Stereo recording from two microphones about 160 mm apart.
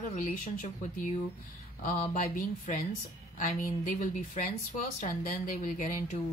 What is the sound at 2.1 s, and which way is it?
Speech, 55° left (ahead or behind).